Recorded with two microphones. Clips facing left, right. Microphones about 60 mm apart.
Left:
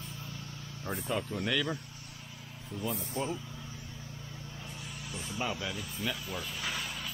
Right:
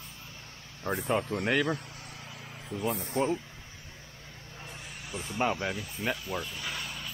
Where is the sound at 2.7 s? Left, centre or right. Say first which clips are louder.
Right 4 dB; right.